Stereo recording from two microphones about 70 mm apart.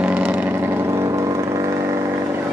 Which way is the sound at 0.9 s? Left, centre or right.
Right.